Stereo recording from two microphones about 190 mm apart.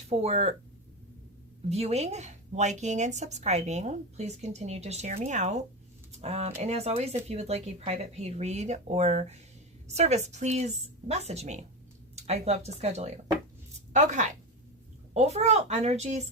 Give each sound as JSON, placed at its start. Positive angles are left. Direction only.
{"t": 0.1, "sound": "a woman's voice", "side_deg": -35}
{"t": 1.7, "sound": "a woman's voice", "side_deg": -35}
{"t": 6.1, "sound": "a sound", "side_deg": -35}
{"t": 6.6, "sound": "a woman's voice", "side_deg": -35}